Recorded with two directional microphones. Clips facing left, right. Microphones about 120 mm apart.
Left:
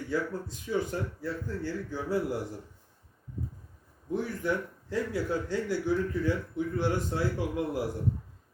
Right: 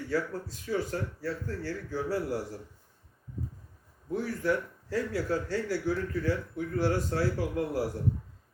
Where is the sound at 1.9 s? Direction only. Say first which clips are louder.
Even; 20° left (ahead or behind).